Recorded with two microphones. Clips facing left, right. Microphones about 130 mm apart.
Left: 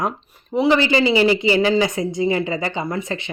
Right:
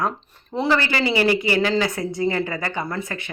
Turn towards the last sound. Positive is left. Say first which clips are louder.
# left 3 dB
turn(degrees=20)  # may be behind; listen again after turning